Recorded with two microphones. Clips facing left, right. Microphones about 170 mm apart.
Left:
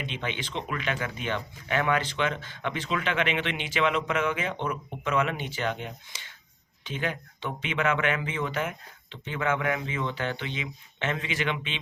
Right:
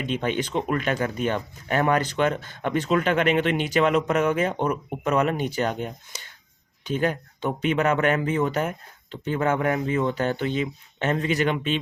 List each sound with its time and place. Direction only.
0.0 s speech: 45° right (ahead or behind)